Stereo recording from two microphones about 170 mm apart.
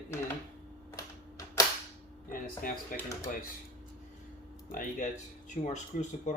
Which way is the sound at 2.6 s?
55° left (ahead or behind).